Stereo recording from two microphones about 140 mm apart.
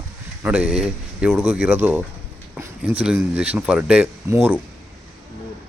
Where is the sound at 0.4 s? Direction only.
10° right (ahead or behind).